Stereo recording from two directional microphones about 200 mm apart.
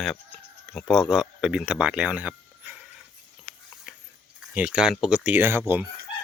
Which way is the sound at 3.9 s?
5° right (ahead or behind).